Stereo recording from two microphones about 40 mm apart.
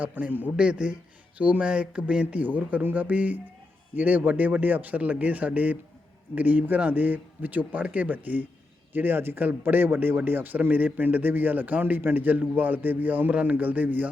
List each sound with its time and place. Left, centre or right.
0.0 s a man's voice: right
0.5 s speech: right
1.4 s speech: right
1.6 s speech: right
2.4 s a man's voice: right
8.9 s a man's voice: right